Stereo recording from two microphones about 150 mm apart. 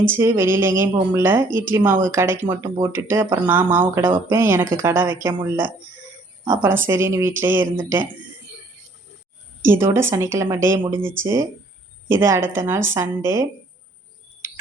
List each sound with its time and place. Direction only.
0.0 s speech: 15° right (ahead or behind)
9.6 s speech: 15° right (ahead or behind)